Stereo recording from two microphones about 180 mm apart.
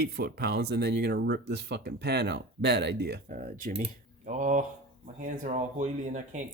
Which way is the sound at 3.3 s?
50° right (ahead or behind).